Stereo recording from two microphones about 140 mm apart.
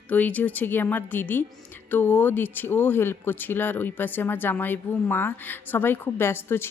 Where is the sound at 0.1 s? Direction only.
10° left (ahead or behind).